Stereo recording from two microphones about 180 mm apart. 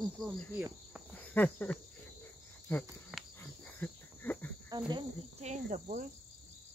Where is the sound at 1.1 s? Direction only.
10° left (ahead or behind).